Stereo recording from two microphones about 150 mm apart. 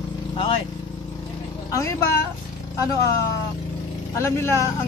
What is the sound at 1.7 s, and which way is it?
Speech, 20° left (ahead or behind).